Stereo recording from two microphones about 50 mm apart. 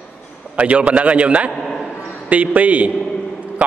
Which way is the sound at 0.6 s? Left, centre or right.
Right.